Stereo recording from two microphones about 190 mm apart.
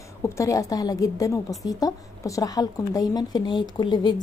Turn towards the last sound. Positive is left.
turn(degrees=20)  # may be behind; listen again after turning